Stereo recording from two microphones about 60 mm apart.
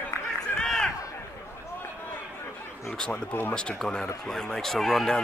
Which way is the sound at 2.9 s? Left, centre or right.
Centre.